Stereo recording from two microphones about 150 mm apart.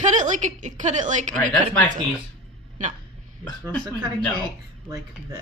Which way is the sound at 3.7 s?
5° left (ahead or behind).